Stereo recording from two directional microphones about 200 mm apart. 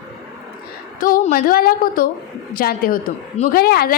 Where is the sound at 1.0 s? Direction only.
45° left (ahead or behind).